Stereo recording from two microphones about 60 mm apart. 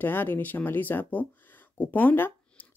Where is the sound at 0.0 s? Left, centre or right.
Left.